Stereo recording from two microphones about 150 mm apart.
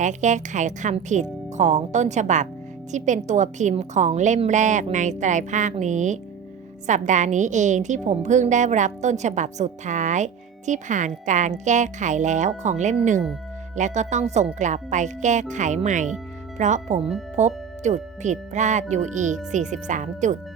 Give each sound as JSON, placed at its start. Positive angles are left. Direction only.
{"t": 0.0, "sound": "a woman's voice", "side_deg": -55}